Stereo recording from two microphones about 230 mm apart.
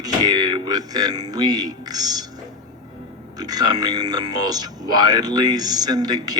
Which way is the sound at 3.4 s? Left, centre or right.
Centre.